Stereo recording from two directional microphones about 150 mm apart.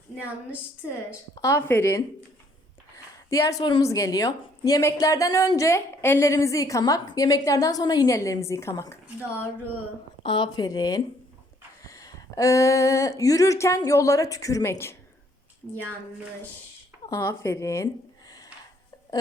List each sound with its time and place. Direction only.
1.4 s a woman's voice: 20° left (ahead or behind)
10.2 s a woman's voice: 30° left (ahead or behind)
17.1 s a woman's voice: 20° left (ahead or behind)
18.3 s a sound: 25° left (ahead or behind)